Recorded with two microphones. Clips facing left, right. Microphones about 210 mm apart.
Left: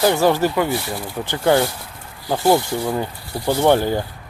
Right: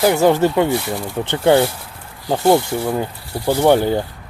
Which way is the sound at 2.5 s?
5° right (ahead or behind).